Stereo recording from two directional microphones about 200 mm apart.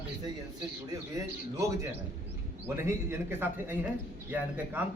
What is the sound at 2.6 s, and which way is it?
A woman's voice, 10° right (ahead or behind).